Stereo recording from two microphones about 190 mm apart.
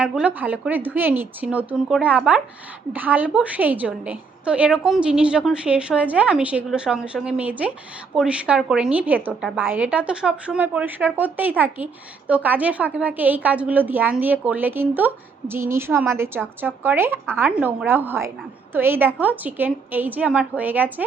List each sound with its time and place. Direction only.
0.0 s a woman's voice: 5° right (ahead or behind)